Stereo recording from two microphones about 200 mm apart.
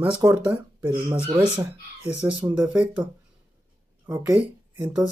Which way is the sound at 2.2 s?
5° right (ahead or behind).